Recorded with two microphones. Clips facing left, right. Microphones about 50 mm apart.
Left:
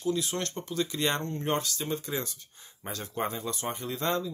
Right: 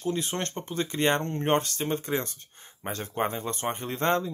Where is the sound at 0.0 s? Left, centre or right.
Right.